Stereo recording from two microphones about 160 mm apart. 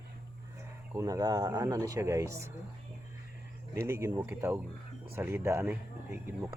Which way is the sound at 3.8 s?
15° right (ahead or behind).